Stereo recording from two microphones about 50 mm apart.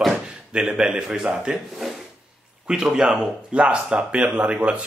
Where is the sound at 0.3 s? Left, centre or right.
Centre.